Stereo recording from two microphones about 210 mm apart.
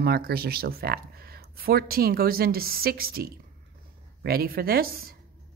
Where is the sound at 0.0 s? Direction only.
45° right (ahead or behind).